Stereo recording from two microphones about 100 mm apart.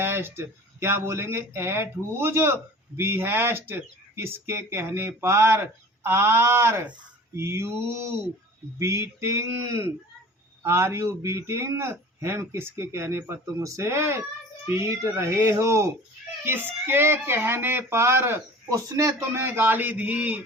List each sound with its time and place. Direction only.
0.0 s speech: 25° right (ahead or behind)